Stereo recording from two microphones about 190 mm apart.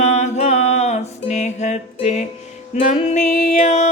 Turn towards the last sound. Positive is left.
turn(degrees=40)  # may be behind; listen again after turning